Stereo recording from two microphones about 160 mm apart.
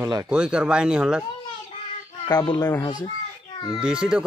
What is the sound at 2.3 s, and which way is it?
Speech, 25° left (ahead or behind).